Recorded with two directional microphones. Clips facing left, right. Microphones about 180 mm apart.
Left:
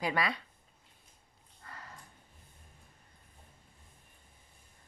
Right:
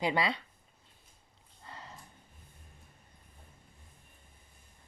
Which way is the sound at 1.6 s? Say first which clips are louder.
Right 2 dB; 25° right (ahead or behind).